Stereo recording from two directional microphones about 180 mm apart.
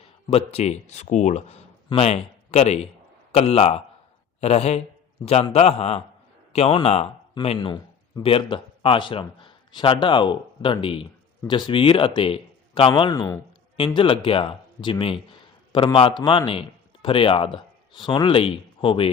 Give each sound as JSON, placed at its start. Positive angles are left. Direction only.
{"t": 0.3, "sound": "speech", "side_deg": 35}
{"t": 13.7, "sound": "a man's voice", "side_deg": 30}